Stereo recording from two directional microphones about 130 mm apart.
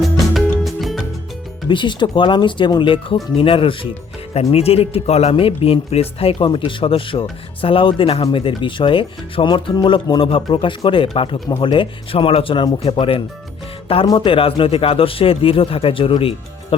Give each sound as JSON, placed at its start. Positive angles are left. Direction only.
{"t": 0.6, "sound": "music", "side_deg": 0}
{"t": 1.7, "sound": "speech", "side_deg": 35}